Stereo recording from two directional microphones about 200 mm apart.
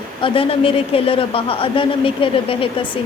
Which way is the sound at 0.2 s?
25° left (ahead or behind).